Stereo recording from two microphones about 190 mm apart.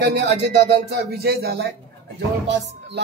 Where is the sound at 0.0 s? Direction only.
65° right (ahead or behind).